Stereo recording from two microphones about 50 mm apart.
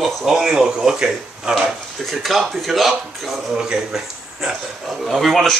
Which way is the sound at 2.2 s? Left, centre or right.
Centre.